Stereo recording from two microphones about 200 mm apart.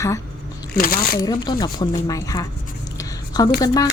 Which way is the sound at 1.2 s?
20° left (ahead or behind).